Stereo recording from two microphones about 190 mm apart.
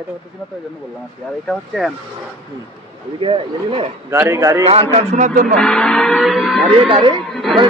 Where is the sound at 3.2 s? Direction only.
30° right (ahead or behind).